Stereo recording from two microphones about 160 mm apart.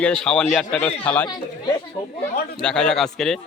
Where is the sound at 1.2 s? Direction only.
25° left (ahead or behind).